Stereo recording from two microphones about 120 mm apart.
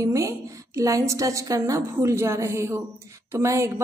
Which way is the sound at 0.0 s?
25° right (ahead or behind).